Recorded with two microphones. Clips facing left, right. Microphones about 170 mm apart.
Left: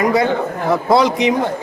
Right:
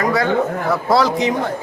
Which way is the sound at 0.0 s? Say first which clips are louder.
Left 1 dB; 20° left (ahead or behind).